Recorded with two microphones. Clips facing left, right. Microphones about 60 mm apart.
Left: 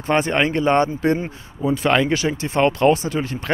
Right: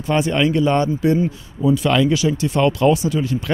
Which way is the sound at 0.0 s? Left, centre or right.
Left.